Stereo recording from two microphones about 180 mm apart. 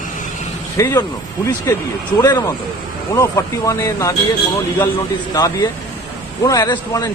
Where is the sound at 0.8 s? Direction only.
15° left (ahead or behind).